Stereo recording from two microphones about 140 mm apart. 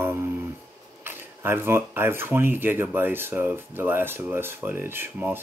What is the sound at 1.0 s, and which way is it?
Speech, 15° right (ahead or behind).